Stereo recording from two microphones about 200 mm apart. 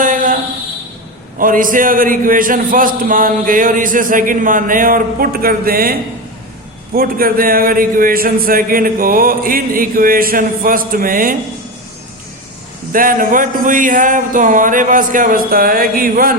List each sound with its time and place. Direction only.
0.0 s a sound: 40° right (ahead or behind)
1.4 s a man's voice: 45° right (ahead or behind)
12.9 s a man's voice: 45° right (ahead or behind)